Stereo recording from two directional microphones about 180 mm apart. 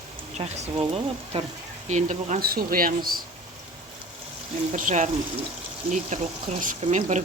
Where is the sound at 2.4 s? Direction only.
55° right (ahead or behind).